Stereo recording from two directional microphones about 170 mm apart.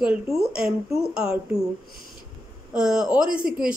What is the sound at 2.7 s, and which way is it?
A woman's voice, 5° right (ahead or behind).